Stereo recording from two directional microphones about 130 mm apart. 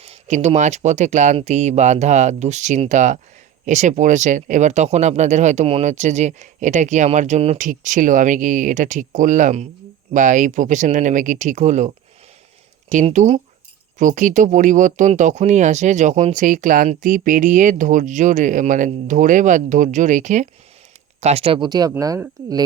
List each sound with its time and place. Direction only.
0.0 s speech: 55° right (ahead or behind)
7.6 s speech: 80° right; by 11.9 s 65° right (ahead or behind)
13.1 s speech: 60° right (ahead or behind)
14.0 s speech: 75° right (ahead or behind)
21.2 s speech: 55° right (ahead or behind); by 22.2 s 25° right (ahead or behind)